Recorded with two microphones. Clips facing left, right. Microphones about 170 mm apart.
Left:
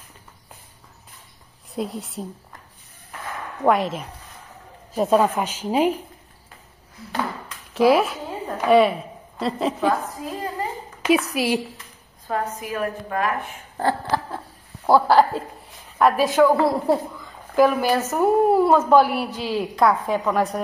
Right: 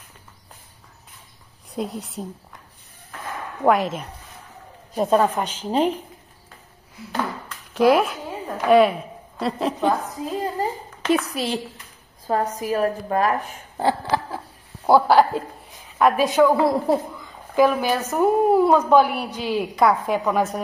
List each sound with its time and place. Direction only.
1.7 s a woman's voice: centre (ahead or behind)
3.6 s a woman's voice: centre (ahead or behind)
7.7 s a woman's voice: centre (ahead or behind)
11.0 s a sound: 10° left (ahead or behind)
11.3 s a woman's voice: 10° left (ahead or behind)
12.3 s a woman's voice: 35° right (ahead or behind)
13.7 s a sound: 10° right (ahead or behind)
14.9 s a woman's voice: centre (ahead or behind)